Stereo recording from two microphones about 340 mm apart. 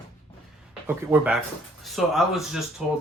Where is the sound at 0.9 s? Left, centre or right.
Centre.